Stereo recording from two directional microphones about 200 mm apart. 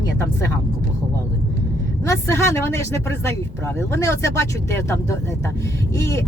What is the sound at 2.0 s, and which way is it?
Speech, 15° left (ahead or behind).